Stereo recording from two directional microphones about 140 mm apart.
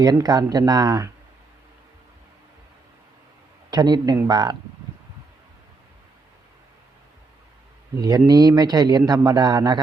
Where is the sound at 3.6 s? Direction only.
30° right (ahead or behind).